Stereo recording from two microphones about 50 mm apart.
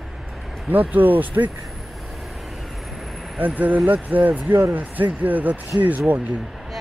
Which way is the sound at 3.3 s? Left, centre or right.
Right.